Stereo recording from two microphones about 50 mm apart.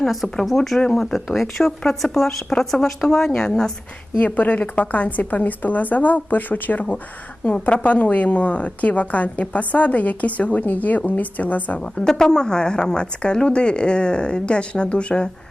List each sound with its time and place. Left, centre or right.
0.0 s speech: centre
0.8 s speech: centre
1.1 s speech: centre
4.2 s a woman's voice: left
11.8 s a woman's voice: centre